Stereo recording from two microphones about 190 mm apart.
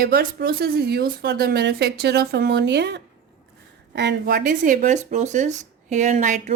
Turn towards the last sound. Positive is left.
turn(degrees=-40)  # may be behind; listen again after turning